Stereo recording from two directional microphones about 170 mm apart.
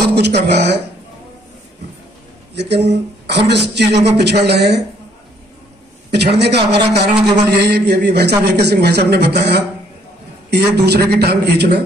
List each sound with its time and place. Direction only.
0.0 s a man's voice: 75° right (ahead or behind)
2.5 s speech: 85° right
6.1 s a man's voice: 80° right